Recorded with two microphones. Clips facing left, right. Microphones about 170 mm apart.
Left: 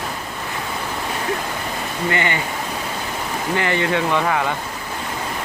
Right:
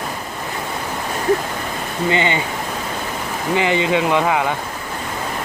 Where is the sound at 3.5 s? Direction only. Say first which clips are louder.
Right 3 dB; 15° right (ahead or behind).